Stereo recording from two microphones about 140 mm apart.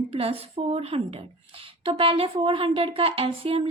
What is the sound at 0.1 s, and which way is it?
A woman's voice, 45° right (ahead or behind).